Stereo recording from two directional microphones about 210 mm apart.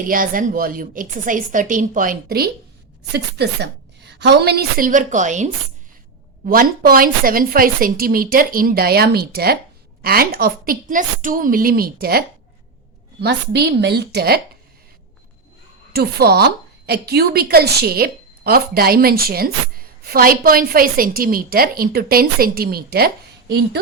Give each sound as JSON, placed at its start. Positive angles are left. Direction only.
{"t": 0.0, "sound": "a woman's voice", "side_deg": -40}
{"t": 15.9, "sound": "a woman's voice", "side_deg": -50}